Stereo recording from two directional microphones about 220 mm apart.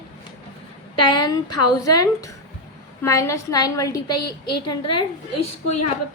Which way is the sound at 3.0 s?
15° left (ahead or behind).